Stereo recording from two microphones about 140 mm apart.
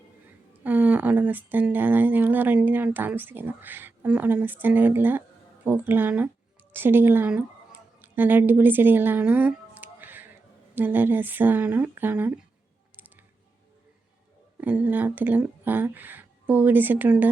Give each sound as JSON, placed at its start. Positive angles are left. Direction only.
{"t": 0.6, "sound": "speech", "side_deg": -10}
{"t": 14.6, "sound": "speech", "side_deg": -10}